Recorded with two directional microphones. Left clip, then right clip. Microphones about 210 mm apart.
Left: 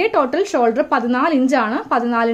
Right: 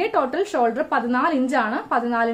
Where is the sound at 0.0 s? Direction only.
30° left (ahead or behind).